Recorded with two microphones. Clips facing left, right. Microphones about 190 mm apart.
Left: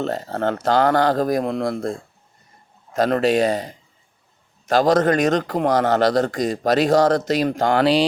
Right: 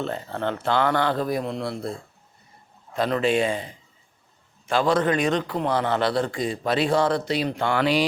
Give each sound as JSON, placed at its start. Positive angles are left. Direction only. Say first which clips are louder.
{"t": 0.0, "sound": "a man's voice", "louder": "left 5 dB", "side_deg": 40}